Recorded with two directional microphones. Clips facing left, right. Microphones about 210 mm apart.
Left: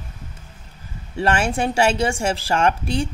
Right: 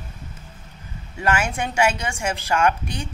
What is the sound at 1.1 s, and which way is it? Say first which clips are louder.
Speech: left 3 dB; 30° left (ahead or behind).